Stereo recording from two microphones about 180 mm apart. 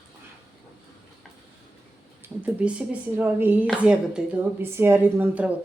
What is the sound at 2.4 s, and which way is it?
Speech, 5° right (ahead or behind).